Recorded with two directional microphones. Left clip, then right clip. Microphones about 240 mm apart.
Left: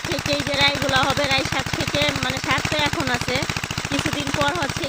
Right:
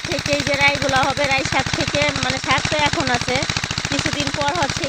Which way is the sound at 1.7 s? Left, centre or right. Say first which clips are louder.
Left 1 dB; left.